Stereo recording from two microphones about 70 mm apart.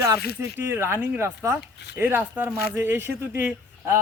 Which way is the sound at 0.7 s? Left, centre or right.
Right.